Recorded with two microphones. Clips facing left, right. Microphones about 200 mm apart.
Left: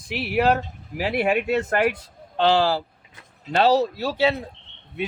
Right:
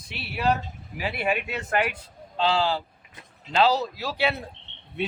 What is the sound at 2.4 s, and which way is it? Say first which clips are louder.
Speech: left 5 dB; 70° left (ahead or behind).